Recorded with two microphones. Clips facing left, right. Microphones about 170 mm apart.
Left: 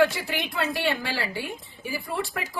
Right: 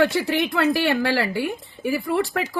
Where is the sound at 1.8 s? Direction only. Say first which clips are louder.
Right 9 dB; 75° right (ahead or behind).